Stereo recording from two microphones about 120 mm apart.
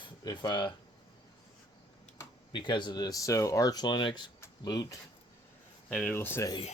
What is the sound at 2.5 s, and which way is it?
Speech, 40° left (ahead or behind).